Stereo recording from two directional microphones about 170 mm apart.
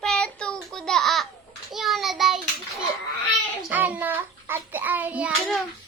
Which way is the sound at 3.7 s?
10° right (ahead or behind).